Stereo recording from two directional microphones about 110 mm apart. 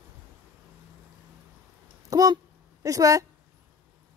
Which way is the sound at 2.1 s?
35° right (ahead or behind).